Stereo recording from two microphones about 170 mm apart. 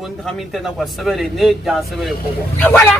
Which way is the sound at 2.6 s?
10° left (ahead or behind).